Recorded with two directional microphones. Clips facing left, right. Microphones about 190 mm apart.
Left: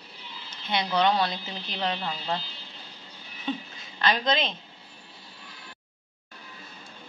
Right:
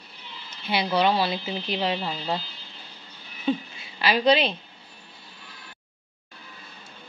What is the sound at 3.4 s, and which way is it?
Speech, 5° right (ahead or behind).